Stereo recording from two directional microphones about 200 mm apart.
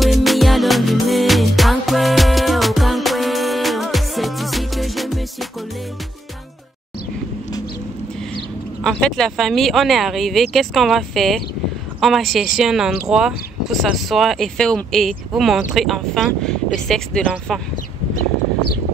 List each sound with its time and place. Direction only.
0.0 s music: centre (ahead or behind)
8.8 s speech: centre (ahead or behind)